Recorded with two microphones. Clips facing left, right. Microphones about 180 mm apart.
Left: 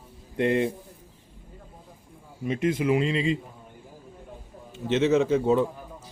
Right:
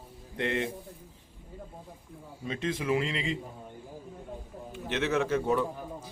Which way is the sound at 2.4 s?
20° left (ahead or behind).